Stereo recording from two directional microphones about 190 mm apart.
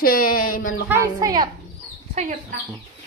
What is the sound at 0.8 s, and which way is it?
Speech, 15° right (ahead or behind).